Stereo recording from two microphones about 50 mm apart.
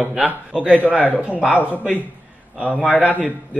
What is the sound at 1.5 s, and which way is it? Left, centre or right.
Speech, left.